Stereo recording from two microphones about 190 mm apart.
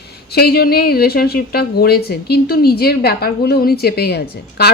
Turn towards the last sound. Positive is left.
turn(degrees=55)  # may be behind; listen again after turning